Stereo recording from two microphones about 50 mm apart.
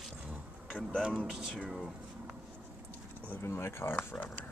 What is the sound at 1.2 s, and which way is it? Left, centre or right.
Speech, centre.